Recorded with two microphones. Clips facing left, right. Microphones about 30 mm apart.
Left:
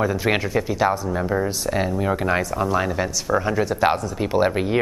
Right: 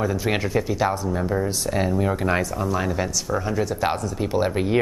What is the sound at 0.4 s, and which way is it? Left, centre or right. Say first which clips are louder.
Speech: left 1 dB; centre.